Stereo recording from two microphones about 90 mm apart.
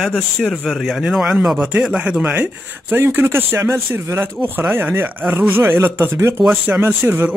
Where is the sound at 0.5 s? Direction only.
Centre (ahead or behind); by 7.2 s 25° right (ahead or behind).